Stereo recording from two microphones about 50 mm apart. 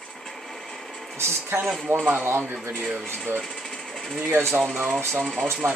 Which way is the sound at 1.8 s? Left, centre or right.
Right.